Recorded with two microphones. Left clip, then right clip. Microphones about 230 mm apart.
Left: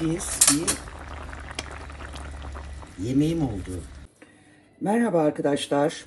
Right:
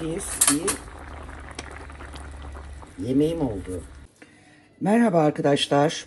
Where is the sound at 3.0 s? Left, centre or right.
Centre.